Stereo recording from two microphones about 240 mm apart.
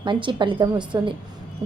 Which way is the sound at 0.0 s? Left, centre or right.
Centre.